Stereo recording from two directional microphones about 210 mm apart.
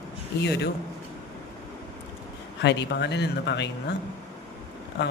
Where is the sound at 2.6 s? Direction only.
55° left (ahead or behind).